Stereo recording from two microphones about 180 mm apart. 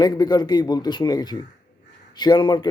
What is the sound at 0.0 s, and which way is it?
A man's voice, 25° left (ahead or behind).